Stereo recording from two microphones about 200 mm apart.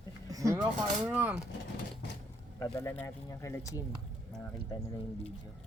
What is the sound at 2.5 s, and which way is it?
Speech, 15° left (ahead or behind).